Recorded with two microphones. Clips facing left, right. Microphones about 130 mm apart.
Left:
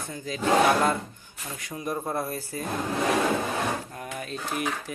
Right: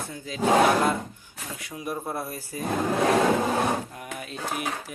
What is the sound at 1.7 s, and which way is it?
Dishes, 5° right (ahead or behind).